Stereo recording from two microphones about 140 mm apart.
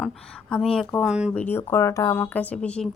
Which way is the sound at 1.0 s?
5° right (ahead or behind).